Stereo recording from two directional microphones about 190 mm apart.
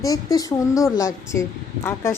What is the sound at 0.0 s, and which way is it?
A woman's voice, 20° left (ahead or behind).